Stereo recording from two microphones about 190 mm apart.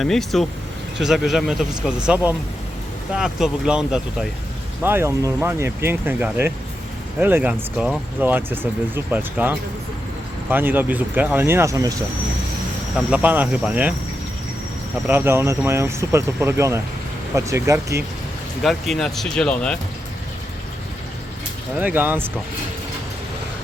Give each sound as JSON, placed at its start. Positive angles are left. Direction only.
{"t": 0.0, "sound": "speech", "side_deg": 0}
{"t": 13.0, "sound": "speech", "side_deg": -5}
{"t": 15.0, "sound": "speech", "side_deg": -10}
{"t": 18.6, "sound": "speech", "side_deg": 0}
{"t": 21.8, "sound": "speech", "side_deg": -10}